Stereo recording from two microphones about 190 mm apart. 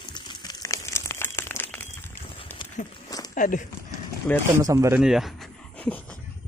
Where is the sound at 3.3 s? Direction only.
45° left (ahead or behind).